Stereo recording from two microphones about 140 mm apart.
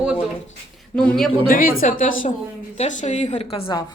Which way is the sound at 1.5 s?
90° left.